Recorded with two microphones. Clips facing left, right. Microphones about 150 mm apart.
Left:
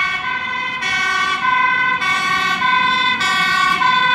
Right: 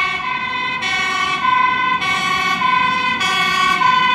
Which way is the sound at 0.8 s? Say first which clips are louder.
Even; 25° right (ahead or behind).